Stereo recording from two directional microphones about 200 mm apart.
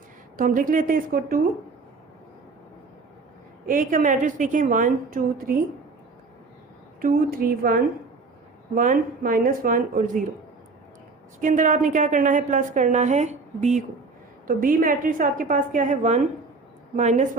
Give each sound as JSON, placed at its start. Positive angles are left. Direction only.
{"t": 0.3, "sound": "a woman's voice", "side_deg": -45}
{"t": 3.7, "sound": "a woman's voice", "side_deg": -45}
{"t": 7.0, "sound": "a woman's voice", "side_deg": -45}
{"t": 11.3, "sound": "a woman's voice", "side_deg": -40}